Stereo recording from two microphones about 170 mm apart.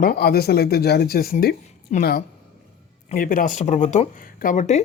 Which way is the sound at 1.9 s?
45° left (ahead or behind).